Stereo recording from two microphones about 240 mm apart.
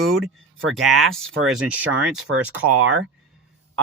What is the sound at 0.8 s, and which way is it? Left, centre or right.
Speech, centre.